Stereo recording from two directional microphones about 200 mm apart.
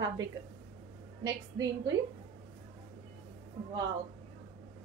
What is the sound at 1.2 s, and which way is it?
Speech, 20° right (ahead or behind).